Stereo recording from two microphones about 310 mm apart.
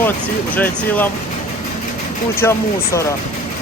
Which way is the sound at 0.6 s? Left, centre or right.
Centre.